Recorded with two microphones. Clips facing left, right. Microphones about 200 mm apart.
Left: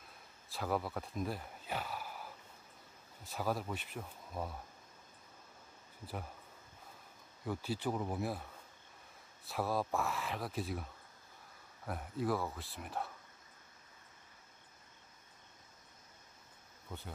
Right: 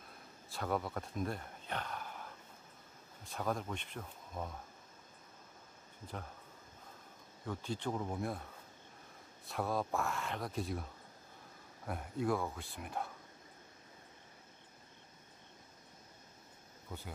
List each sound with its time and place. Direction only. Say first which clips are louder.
0.5 s speech: even; centre (ahead or behind)
7.4 s speech: left 2 dB; 5° left (ahead or behind)
9.5 s speech: left 1 dB; centre (ahead or behind)